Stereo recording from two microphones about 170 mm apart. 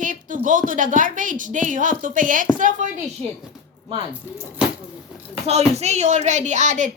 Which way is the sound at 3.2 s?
35° right (ahead or behind).